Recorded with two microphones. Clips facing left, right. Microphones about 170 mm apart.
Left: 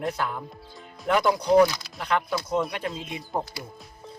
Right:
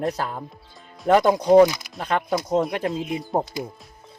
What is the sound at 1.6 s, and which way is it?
Speech, 15° right (ahead or behind).